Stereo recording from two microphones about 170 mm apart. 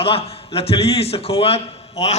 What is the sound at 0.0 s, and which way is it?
A man's voice, 35° left (ahead or behind).